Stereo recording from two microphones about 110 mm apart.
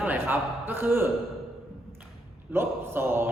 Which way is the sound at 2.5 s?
20° right (ahead or behind).